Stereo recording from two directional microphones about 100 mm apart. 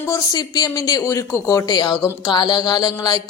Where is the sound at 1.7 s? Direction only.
50° left (ahead or behind).